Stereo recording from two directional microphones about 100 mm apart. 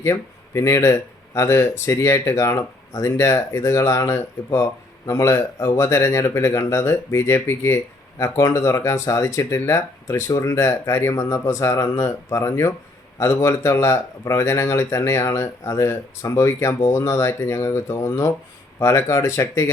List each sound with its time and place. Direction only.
0.0 s speech: 30° left (ahead or behind)